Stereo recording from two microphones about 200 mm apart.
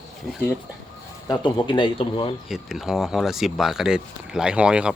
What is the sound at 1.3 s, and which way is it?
Speech, 20° left (ahead or behind).